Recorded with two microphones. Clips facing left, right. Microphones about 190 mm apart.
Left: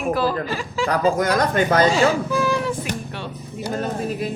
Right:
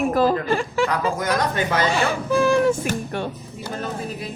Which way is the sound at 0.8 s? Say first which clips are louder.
Left 4 dB; 45° left (ahead or behind).